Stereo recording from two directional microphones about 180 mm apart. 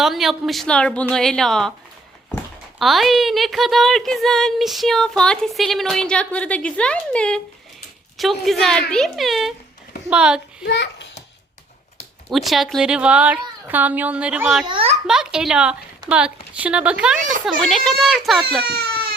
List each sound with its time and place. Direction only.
0.0 s speech: centre (ahead or behind)
10.6 s a sound: 75° left (ahead or behind)
12.3 s speech: centre (ahead or behind)
14.7 s a child's voice: 30° right (ahead or behind)
15.0 s speech: 5° right (ahead or behind)
18.6 s speech: 65° right (ahead or behind)